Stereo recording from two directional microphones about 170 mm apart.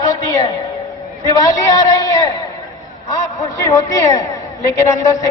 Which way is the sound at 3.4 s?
20° left (ahead or behind).